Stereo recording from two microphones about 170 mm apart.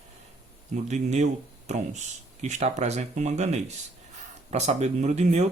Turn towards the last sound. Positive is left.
turn(degrees=-40)  # may be behind; listen again after turning